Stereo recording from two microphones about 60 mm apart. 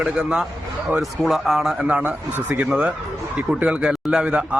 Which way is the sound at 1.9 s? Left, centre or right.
Right.